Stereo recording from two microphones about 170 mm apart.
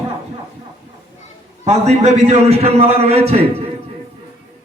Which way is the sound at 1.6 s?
40° right (ahead or behind).